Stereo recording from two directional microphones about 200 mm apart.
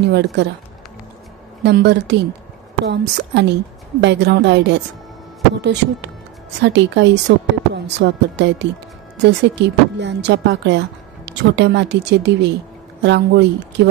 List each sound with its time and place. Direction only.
0.0 s speech: 60° right (ahead or behind)
1.6 s speech: 55° right (ahead or behind)